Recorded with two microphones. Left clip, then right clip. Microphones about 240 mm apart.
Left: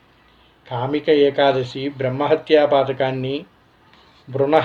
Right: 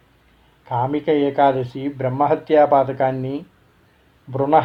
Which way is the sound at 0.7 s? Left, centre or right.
Right.